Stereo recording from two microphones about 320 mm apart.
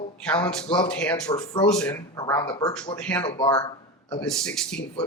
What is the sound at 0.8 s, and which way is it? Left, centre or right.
Speech, centre.